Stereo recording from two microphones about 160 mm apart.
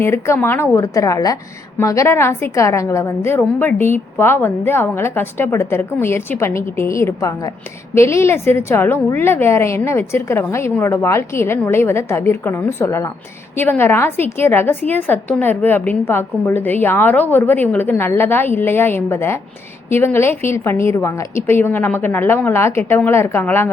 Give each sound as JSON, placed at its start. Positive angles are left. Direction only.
{"t": 0.0, "sound": "a woman's voice", "side_deg": 15}